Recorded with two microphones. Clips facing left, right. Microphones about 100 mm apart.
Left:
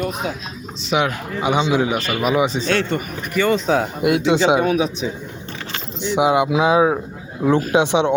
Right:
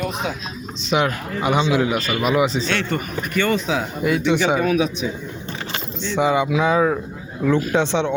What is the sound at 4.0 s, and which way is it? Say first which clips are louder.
Speech: right 1 dB; 70° left (ahead or behind).